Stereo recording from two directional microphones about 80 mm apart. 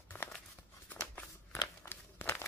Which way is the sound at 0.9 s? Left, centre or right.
Centre.